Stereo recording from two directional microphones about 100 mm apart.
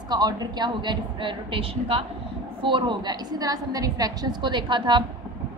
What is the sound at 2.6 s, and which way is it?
A woman's voice, 55° right (ahead or behind).